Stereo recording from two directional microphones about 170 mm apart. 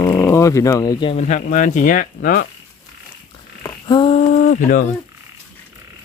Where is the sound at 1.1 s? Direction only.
45° left (ahead or behind).